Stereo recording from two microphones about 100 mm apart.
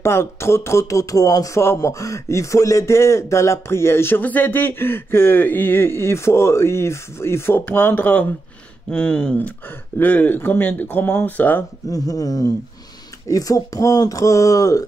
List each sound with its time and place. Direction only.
0.0 s speech: 25° left (ahead or behind)
11.9 s speech: 35° left (ahead or behind)